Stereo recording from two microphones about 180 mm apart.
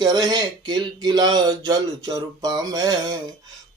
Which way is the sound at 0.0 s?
20° right (ahead or behind).